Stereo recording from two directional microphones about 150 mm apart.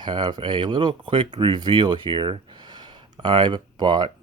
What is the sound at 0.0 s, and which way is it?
Speech, 30° right (ahead or behind).